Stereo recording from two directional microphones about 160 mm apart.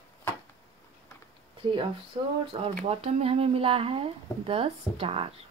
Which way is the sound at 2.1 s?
30° right (ahead or behind).